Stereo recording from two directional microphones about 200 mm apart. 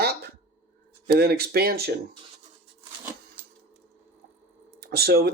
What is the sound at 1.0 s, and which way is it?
Speech, 50° right (ahead or behind).